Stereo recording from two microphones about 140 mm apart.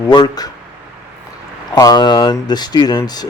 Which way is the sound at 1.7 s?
30° left (ahead or behind).